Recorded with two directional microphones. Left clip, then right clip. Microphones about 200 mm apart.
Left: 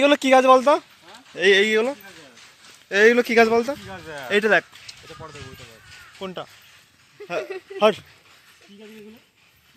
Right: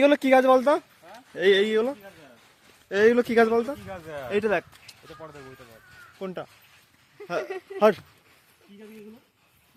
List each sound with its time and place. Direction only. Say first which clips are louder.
0.0 s speech: left 3 dB; 5° right (ahead or behind)
3.8 s speech: left 1 dB; 50° right (ahead or behind)
4.3 s speech: left 7 dB; 5° left (ahead or behind)
5.0 s speech: left 1 dB; 40° right (ahead or behind)
6.1 s speech: left 2 dB; 25° right (ahead or behind)